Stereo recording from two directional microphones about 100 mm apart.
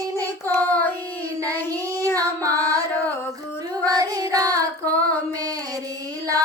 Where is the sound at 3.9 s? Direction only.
40° right (ahead or behind).